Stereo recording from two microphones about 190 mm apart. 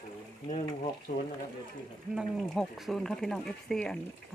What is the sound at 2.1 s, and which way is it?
Speech, centre (ahead or behind).